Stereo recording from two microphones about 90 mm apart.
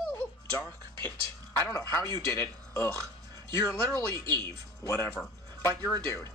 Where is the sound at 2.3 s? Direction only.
30° left (ahead or behind).